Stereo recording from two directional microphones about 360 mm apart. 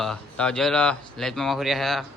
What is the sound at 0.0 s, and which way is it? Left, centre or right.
Speech, centre.